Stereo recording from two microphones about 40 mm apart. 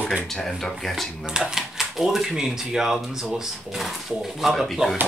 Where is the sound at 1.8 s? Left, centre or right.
Centre.